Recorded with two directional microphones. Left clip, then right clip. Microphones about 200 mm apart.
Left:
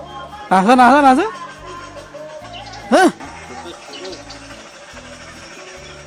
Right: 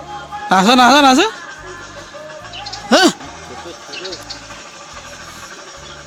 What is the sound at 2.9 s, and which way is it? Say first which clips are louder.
Music: right 1 dB; centre (ahead or behind).